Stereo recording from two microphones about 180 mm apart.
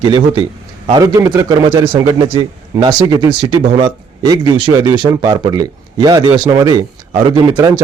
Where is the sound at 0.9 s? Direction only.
20° right (ahead or behind).